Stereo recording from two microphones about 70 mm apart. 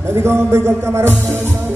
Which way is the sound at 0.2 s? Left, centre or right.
Right.